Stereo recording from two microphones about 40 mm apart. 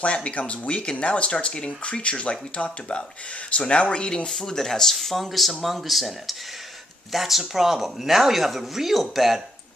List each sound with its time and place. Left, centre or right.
0.0 s speech: left
4.3 s speech: centre